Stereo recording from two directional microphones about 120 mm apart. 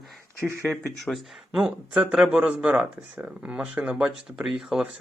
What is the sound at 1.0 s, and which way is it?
Speech, centre (ahead or behind).